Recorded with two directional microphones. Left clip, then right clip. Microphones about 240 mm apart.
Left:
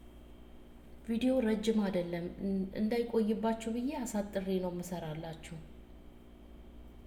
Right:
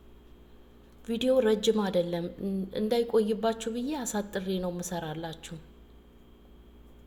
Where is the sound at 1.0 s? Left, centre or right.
Right.